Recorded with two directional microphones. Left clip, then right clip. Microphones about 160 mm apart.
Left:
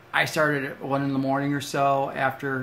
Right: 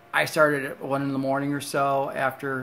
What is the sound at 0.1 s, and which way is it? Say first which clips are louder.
Speech: right 2 dB; 30° right (ahead or behind).